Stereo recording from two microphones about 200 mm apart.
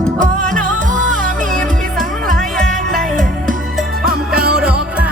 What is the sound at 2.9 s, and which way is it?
Music, 40° right (ahead or behind).